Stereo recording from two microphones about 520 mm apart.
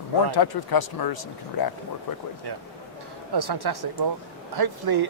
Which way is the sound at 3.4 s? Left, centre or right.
Right.